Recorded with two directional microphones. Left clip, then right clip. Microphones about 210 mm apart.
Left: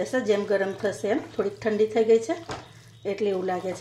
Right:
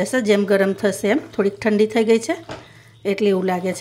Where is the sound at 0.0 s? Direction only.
40° right (ahead or behind).